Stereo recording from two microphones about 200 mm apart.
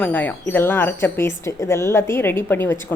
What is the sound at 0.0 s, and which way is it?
Speech, 10° left (ahead or behind).